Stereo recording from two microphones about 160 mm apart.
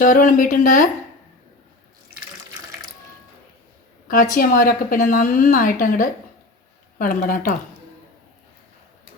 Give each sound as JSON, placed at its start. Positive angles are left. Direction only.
{"t": 0.0, "sound": "a woman's voice", "side_deg": 60}
{"t": 4.4, "sound": "a woman's voice", "side_deg": 60}